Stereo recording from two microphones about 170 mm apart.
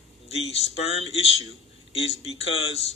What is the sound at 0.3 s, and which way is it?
Speech, 35° left (ahead or behind).